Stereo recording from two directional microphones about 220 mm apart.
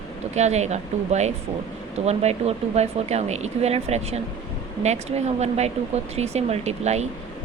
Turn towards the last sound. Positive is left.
turn(degrees=-30)  # may be behind; listen again after turning